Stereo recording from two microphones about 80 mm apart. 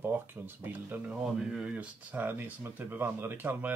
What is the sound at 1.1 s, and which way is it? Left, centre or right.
Speech, centre.